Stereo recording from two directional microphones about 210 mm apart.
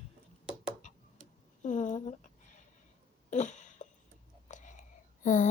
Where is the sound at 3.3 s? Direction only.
35° left (ahead or behind).